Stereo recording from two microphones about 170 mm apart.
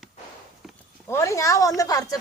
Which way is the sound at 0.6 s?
Centre (ahead or behind).